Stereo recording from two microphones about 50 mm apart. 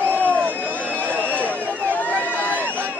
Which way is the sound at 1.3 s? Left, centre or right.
Left.